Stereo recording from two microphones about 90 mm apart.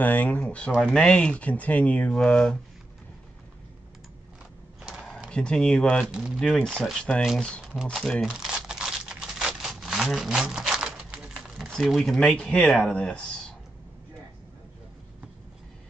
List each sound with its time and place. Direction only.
0.0 s speech: 20° left (ahead or behind)
0.7 s speech: 10° right (ahead or behind)
0.9 s speech: 10° left (ahead or behind)
2.1 s speech: 5° left (ahead or behind)
4.8 s a sound: 5° right (ahead or behind)
5.3 s speech: 10° left (ahead or behind)
6.1 s speech: 10° right (ahead or behind)
6.4 s speech: 5° left (ahead or behind)
7.6 s speech: 5° right (ahead or behind)
8.2 s crumpling: 10° right (ahead or behind)
11.5 s speech: centre (ahead or behind)